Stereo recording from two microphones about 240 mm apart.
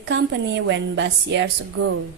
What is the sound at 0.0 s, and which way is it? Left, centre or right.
A woman's voice, right.